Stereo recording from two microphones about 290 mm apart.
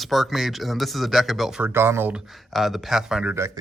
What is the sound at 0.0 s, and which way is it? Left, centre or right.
Speech, centre.